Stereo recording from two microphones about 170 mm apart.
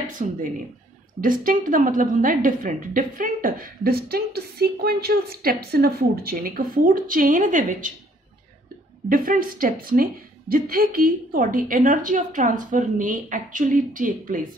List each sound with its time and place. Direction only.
0.0 s a woman's voice: 50° right (ahead or behind)
9.1 s a woman's voice: 55° right (ahead or behind)